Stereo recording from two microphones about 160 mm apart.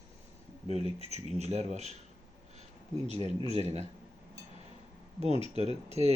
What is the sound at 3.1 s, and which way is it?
Speech, 45° right (ahead or behind).